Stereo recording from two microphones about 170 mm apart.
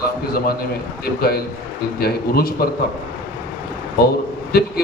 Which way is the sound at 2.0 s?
65° left (ahead or behind).